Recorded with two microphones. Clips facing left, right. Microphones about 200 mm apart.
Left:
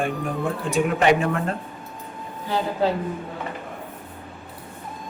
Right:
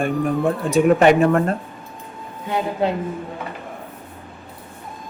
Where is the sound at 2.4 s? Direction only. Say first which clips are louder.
Right 2 dB; 20° right (ahead or behind).